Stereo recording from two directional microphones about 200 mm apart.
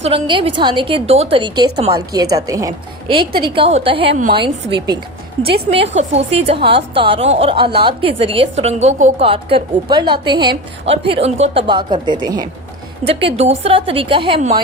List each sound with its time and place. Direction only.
0.0 s a woman's voice: 25° right (ahead or behind)
5.9 s a woman's voice: 35° right (ahead or behind)